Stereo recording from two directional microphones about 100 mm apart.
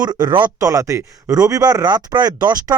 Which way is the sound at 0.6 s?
35° right (ahead or behind).